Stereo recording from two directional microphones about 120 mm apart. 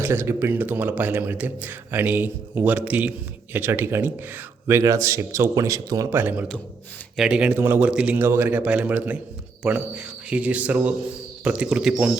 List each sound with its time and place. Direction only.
0.0 s a man's voice: 20° right (ahead or behind)